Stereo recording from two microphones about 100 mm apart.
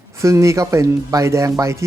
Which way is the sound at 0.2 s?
30° right (ahead or behind).